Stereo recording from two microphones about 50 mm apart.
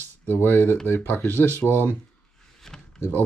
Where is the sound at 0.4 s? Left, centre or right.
Left.